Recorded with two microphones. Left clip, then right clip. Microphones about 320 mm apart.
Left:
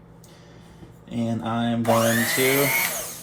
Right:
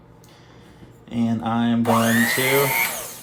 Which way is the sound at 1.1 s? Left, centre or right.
Right.